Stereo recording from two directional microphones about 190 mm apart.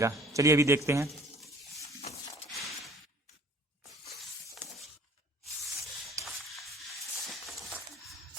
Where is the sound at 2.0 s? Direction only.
35° left (ahead or behind).